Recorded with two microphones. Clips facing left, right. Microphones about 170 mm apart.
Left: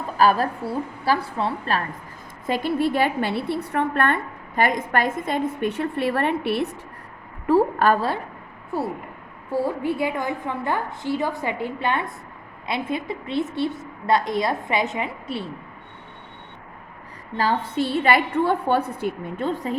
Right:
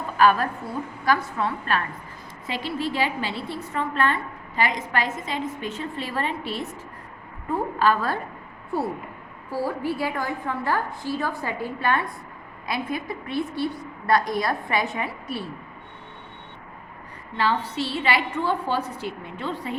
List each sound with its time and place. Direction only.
0.2 s a woman's voice: 35° left (ahead or behind)
2.5 s a woman's voice: 50° left (ahead or behind)
7.4 s a sound: 80° left
9.5 s a woman's voice: 25° left (ahead or behind)
17.3 s a woman's voice: 45° left (ahead or behind)